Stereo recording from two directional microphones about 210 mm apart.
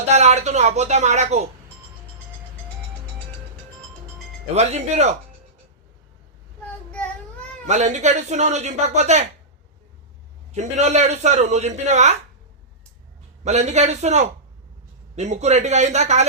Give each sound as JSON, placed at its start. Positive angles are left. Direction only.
{"t": 0.1, "sound": "a man's voice", "side_deg": -30}
{"t": 4.5, "sound": "a man's voice", "side_deg": -30}
{"t": 7.7, "sound": "a man's voice", "side_deg": -35}
{"t": 10.5, "sound": "a man's voice", "side_deg": -35}
{"t": 13.4, "sound": "a man's voice", "side_deg": -30}